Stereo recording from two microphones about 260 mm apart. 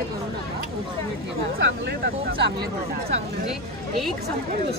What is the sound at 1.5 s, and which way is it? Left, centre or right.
Speech, right.